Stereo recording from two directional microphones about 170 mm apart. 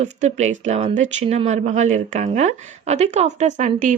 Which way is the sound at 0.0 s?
40° right (ahead or behind).